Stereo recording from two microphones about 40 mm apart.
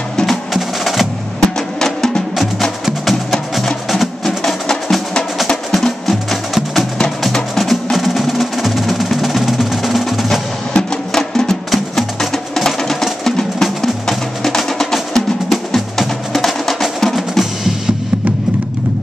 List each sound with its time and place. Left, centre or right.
0.3 s music: centre
2.8 s music: centre
5.5 s music: centre
6.5 s music: centre
10.7 s music: centre
11.7 s music: centre
17.0 s percussion: centre